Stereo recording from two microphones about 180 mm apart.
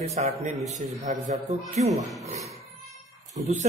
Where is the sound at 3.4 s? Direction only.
40° right (ahead or behind).